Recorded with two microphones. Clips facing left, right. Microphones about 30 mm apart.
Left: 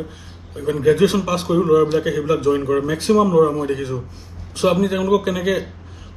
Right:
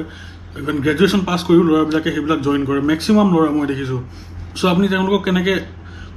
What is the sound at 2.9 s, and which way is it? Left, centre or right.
A man's voice, right.